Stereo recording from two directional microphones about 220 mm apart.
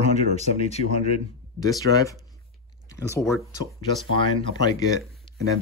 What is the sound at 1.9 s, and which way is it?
Speech, 15° left (ahead or behind).